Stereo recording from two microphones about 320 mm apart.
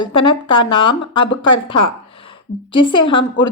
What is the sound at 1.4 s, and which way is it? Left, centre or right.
Speech, left.